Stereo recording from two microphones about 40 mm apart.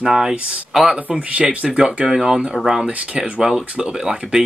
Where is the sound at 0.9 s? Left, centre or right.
Right.